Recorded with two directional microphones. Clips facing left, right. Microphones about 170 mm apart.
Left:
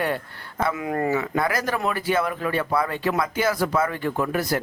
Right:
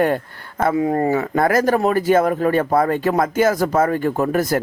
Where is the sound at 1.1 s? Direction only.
45° right (ahead or behind).